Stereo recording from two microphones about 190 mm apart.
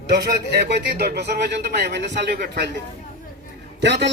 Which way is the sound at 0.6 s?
60° right (ahead or behind).